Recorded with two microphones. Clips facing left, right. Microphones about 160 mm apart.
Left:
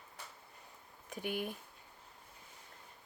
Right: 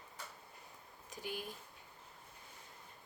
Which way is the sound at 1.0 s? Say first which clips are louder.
Left 6 dB; 60° left (ahead or behind).